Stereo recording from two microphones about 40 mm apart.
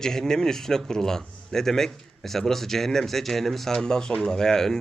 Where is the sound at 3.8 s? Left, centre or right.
Centre.